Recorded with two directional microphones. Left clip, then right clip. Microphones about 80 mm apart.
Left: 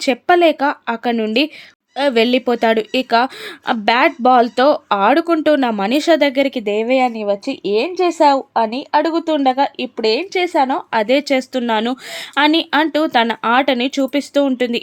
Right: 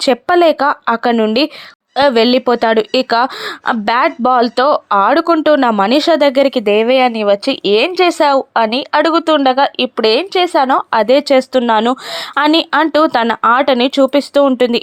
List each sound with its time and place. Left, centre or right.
0.0 s speech: right
10.3 s speech: centre
10.7 s speech: right
12.3 s speech: right